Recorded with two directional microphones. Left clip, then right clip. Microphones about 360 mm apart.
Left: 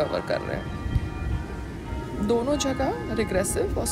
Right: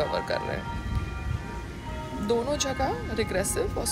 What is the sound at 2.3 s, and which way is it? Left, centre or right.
Speech, centre.